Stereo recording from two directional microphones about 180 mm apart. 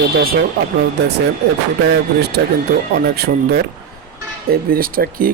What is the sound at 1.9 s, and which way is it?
A man's voice, 65° right (ahead or behind).